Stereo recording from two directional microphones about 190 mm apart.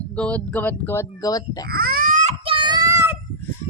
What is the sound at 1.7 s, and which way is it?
Baby cry, 50° right (ahead or behind).